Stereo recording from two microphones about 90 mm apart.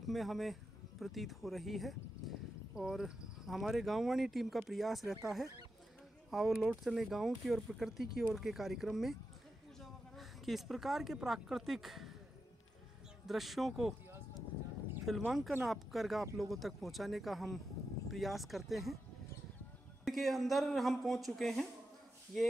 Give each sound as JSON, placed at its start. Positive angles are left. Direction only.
{"t": 0.0, "sound": "speech", "side_deg": 0}
{"t": 13.3, "sound": "speech", "side_deg": 0}
{"t": 15.0, "sound": "speech", "side_deg": 0}
{"t": 20.1, "sound": "speech", "side_deg": 0}